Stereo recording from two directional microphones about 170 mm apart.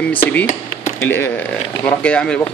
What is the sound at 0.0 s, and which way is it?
A man's voice, 10° left (ahead or behind).